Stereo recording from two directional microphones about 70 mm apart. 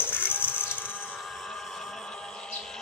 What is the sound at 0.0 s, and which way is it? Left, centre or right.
Printer, left.